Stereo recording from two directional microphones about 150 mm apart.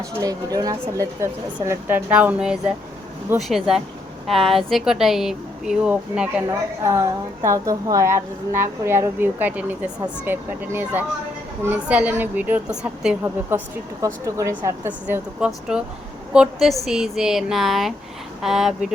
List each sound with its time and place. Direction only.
0.0 s a woman's voice: 25° right (ahead or behind); by 2.7 s 5° right (ahead or behind)
3.3 s a woman's voice: 15° right (ahead or behind)
4.3 s speech: centre (ahead or behind)
6.5 s a woman's voice: 20° right (ahead or behind); by 18.9 s 5° right (ahead or behind)